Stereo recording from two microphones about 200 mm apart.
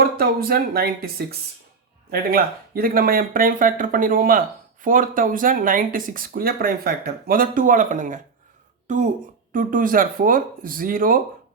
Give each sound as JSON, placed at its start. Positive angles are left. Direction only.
{"t": 0.0, "sound": "speech", "side_deg": -50}